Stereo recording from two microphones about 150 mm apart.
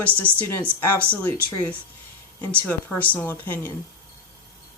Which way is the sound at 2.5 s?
10° left (ahead or behind).